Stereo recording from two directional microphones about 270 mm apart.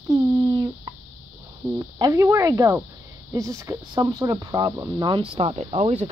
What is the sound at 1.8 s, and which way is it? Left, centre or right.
Speech, centre.